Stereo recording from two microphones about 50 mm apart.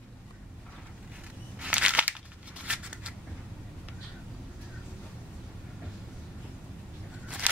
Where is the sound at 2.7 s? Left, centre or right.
Right.